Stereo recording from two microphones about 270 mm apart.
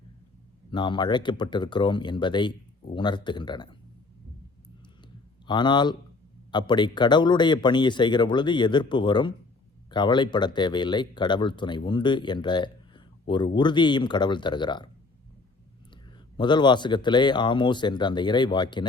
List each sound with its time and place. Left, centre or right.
0.7 s speech: centre
5.5 s speech: centre
16.4 s speech: centre